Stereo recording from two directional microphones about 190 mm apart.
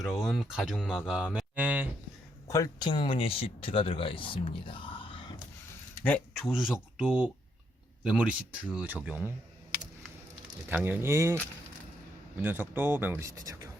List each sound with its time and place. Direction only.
0.0 s speech: centre (ahead or behind)
2.5 s speech: 20° left (ahead or behind)
6.0 s speech: 10° left (ahead or behind); by 9.3 s 10° right (ahead or behind)
10.7 s speech: 10° right (ahead or behind)
12.4 s speech: 10° right (ahead or behind)